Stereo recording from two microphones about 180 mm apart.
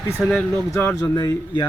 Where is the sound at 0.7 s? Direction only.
15° left (ahead or behind).